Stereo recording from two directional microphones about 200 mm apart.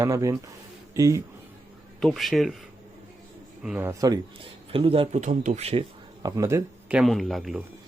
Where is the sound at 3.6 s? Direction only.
10° right (ahead or behind); by 5.8 s 30° right (ahead or behind).